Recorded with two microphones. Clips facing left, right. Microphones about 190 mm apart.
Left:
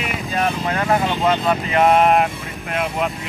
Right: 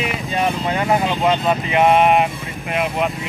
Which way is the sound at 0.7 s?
15° right (ahead or behind).